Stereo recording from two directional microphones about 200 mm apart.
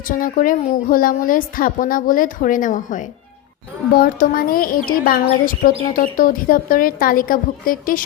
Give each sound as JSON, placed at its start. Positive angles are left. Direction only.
{"t": 0.0, "sound": "a woman's voice", "side_deg": 45}